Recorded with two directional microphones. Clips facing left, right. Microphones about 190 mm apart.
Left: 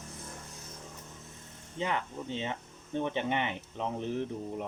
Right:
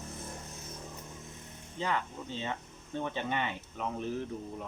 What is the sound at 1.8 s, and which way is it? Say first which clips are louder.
Speech: left 1 dB; 20° left (ahead or behind).